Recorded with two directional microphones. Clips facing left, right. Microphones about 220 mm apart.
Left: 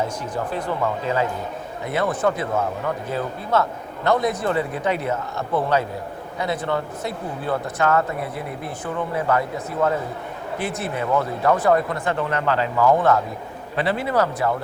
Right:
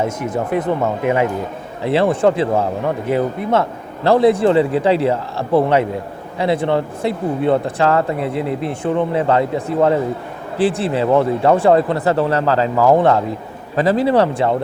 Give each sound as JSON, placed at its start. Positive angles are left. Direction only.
{"t": 0.0, "sound": "speech", "side_deg": -25}
{"t": 10.6, "sound": "speech", "side_deg": -30}
{"t": 13.0, "sound": "speech", "side_deg": -25}
{"t": 13.7, "sound": "speech", "side_deg": -40}